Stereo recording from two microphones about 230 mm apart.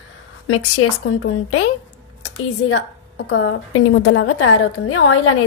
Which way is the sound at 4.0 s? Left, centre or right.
Left.